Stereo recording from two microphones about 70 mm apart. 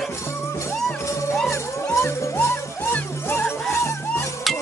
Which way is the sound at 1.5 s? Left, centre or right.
Left.